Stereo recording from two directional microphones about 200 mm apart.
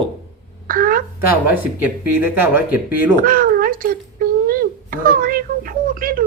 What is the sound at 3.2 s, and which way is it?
Speech, 45° right (ahead or behind).